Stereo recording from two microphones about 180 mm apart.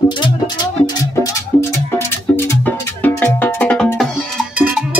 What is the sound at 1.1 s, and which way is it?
Music, 15° left (ahead or behind).